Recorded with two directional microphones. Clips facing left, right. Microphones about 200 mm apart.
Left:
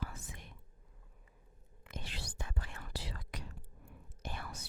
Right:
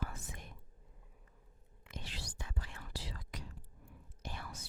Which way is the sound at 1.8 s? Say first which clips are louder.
Left 1 dB; 50° left (ahead or behind).